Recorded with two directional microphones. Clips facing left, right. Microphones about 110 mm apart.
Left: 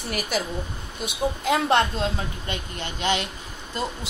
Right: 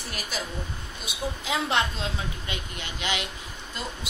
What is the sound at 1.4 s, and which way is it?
Speech, 50° left (ahead or behind).